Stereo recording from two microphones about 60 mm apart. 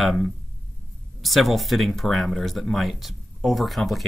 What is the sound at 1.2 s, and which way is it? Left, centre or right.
Speech, centre.